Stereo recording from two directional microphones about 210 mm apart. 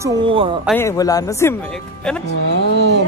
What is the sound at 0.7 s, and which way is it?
Speech, 15° left (ahead or behind).